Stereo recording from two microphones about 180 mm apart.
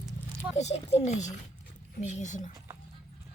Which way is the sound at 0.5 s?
35° left (ahead or behind).